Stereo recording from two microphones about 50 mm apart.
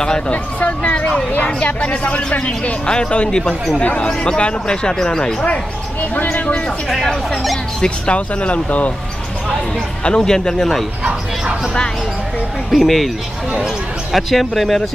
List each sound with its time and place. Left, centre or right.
0.3 s speech: left
6.3 s speech: left
7.1 s speech: centre
8.1 s speech: left
10.0 s speech: centre
12.7 s speech: centre
14.1 s speech: centre